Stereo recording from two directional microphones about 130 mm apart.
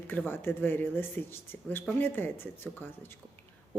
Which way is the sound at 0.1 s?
15° left (ahead or behind).